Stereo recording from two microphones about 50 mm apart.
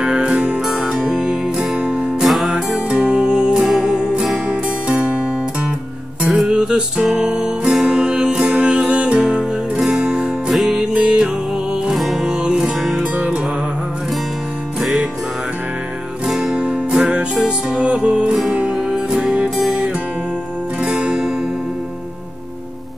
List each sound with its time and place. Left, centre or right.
0.0 s music: centre
2.2 s music: centre
2.7 s music: centre
3.6 s music: centre
4.5 s music: right
6.2 s music: centre
9.8 s music: centre
10.8 s music: centre
11.9 s music: centre
12.3 s music: centre
13.1 s music: right
14.8 s music: centre
16.3 s music: centre
20.8 s music: centre